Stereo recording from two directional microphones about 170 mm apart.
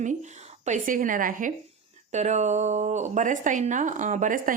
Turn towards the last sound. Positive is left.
turn(degrees=-50)  # may be behind; listen again after turning